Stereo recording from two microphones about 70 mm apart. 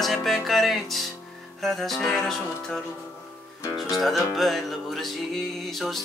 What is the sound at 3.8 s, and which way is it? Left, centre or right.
Speech, centre.